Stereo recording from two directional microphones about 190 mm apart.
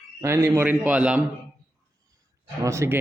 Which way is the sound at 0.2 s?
15° right (ahead or behind).